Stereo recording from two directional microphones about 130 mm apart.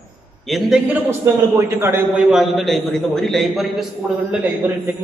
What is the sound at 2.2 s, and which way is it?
Speech, centre (ahead or behind).